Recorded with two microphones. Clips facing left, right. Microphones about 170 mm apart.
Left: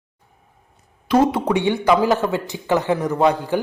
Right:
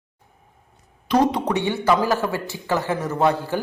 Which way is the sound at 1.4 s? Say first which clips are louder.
Left 3 dB; 15° left (ahead or behind).